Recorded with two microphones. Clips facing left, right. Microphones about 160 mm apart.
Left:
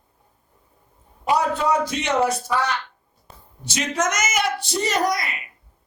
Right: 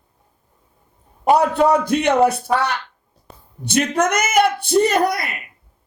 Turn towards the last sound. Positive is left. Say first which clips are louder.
# right 6 dB
turn(degrees=-55)  # may be behind; listen again after turning